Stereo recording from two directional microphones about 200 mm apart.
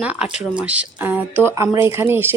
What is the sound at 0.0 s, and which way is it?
A woman's voice, 5° right (ahead or behind).